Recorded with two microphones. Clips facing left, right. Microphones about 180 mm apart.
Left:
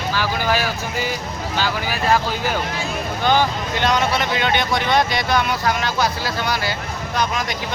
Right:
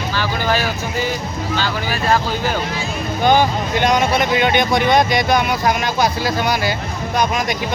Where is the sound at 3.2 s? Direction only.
15° right (ahead or behind).